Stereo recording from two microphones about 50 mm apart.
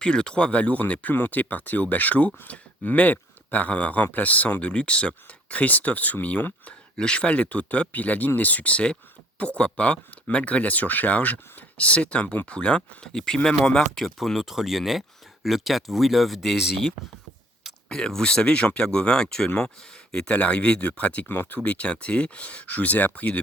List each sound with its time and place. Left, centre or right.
0.0 s speech: centre
6.9 s speech: centre
14.0 s speech: centre
17.8 s speech: centre
21.2 s speech: left